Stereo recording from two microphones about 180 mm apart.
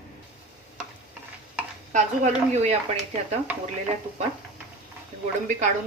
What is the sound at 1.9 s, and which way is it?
Speech, 40° right (ahead or behind).